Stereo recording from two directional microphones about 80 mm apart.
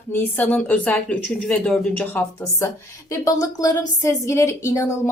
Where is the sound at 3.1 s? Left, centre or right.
Left.